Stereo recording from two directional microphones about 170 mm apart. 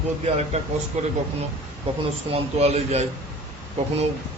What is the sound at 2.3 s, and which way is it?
Speech, 40° right (ahead or behind).